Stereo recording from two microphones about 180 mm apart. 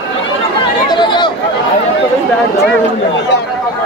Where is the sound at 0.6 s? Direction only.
25° left (ahead or behind).